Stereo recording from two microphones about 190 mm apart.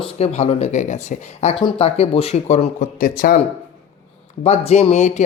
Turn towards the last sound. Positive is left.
turn(degrees=35)  # may be behind; listen again after turning